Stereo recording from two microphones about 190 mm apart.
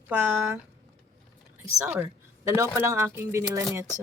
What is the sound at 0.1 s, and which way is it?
Speech, 10° right (ahead or behind).